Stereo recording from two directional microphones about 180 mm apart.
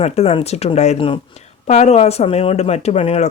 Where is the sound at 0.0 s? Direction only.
35° left (ahead or behind).